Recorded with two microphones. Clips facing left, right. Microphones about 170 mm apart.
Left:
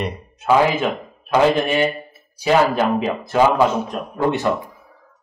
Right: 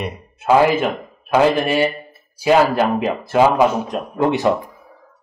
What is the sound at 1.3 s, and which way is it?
Speech, 10° right (ahead or behind).